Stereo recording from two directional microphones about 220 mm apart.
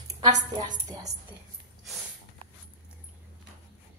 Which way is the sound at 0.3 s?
35° right (ahead or behind).